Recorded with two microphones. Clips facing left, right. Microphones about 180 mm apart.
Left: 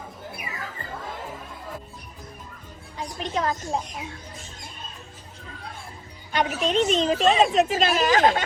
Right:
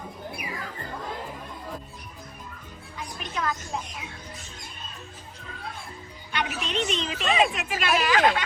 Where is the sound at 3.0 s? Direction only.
30° left (ahead or behind).